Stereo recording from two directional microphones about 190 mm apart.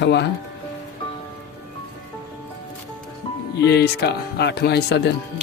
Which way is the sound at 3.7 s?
60° left (ahead or behind).